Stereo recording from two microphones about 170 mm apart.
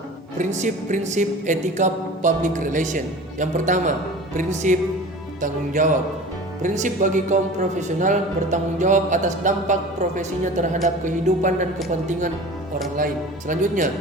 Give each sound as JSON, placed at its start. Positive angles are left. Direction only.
{"t": 0.3, "sound": "speech", "side_deg": -45}
{"t": 13.0, "sound": "speech", "side_deg": -50}